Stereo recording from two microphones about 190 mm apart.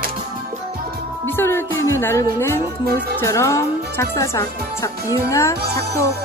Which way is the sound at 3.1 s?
15° left (ahead or behind).